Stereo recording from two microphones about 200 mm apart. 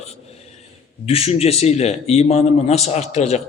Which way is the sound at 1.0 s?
30° left (ahead or behind).